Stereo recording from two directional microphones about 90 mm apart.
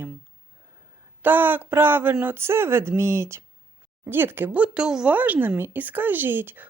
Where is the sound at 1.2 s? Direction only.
20° right (ahead or behind).